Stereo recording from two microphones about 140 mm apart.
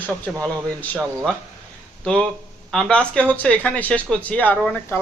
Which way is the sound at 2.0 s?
5° left (ahead or behind).